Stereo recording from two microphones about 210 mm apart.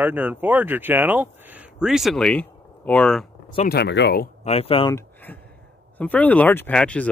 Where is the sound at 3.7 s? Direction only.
55° left (ahead or behind).